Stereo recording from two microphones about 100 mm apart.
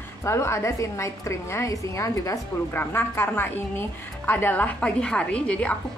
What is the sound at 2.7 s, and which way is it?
A woman's voice, 20° left (ahead or behind).